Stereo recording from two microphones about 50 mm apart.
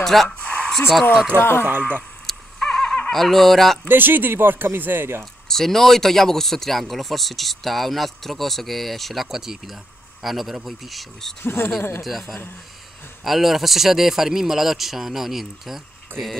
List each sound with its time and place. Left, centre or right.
0.0 s a sound: centre
1.3 s speech: left
1.7 s speech: right
2.2 s a sound: centre
3.1 s speech: centre
3.8 s speech: right
5.2 s speech: centre
11.4 s speech: left
12.0 s speech: centre